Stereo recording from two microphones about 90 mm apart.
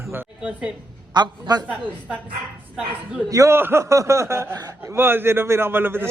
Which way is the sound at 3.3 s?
35° right (ahead or behind).